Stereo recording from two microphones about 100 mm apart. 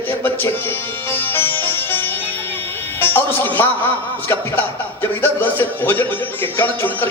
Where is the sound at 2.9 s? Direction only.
20° left (ahead or behind).